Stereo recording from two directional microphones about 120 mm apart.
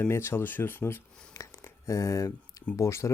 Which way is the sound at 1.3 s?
25° left (ahead or behind).